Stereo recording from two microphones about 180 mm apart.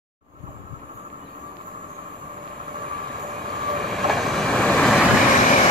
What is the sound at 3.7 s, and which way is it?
Vehicle, centre (ahead or behind).